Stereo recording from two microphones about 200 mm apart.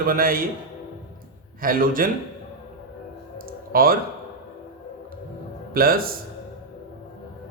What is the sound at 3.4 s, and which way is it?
Clicking, 45° right (ahead or behind).